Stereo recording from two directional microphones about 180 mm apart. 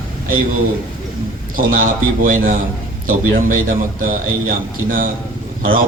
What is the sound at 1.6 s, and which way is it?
A man's voice, 50° right (ahead or behind).